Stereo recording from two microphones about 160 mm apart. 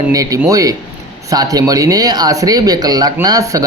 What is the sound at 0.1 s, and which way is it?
Speech, 20° right (ahead or behind).